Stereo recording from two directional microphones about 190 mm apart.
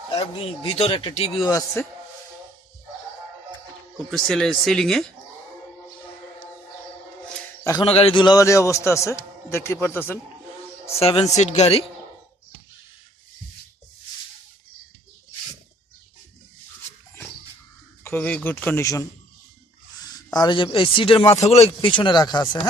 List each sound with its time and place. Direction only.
0.8 s speech: 25° left (ahead or behind)
1.5 s a man's voice: 15° left (ahead or behind)
3.9 s speech: centre (ahead or behind)
7.6 s a man's voice: 15° left (ahead or behind)
7.9 s a man's voice: 30° left (ahead or behind); by 10.2 s 10° left (ahead or behind)
10.9 s speech: 30° left (ahead or behind)
18.0 s a man's voice: 10° left (ahead or behind)